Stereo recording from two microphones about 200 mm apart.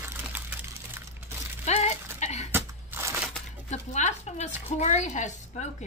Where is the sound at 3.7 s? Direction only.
35° left (ahead or behind).